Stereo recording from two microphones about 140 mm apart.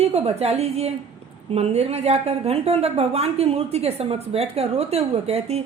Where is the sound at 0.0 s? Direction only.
50° right (ahead or behind).